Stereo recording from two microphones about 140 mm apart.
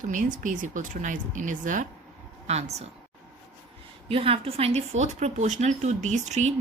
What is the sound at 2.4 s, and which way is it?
Speech, 50° right (ahead or behind).